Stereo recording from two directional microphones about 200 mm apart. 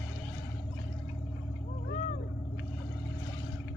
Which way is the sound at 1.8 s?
40° left (ahead or behind).